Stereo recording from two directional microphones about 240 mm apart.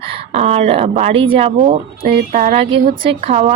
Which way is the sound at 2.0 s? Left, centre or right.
Right.